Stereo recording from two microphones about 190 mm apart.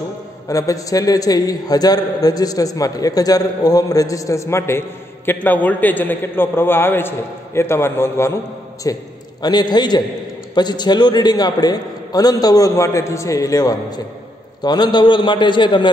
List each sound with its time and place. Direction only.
0.5 s a man's voice: 20° left (ahead or behind)